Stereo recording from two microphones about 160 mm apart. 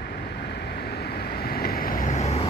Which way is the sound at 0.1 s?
90° left.